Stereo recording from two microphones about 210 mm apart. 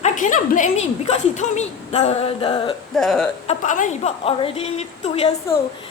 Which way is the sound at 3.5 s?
35° left (ahead or behind).